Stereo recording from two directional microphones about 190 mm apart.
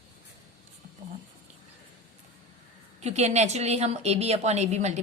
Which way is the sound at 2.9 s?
35° right (ahead or behind).